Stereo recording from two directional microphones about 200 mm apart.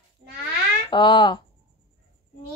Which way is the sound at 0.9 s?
25° left (ahead or behind).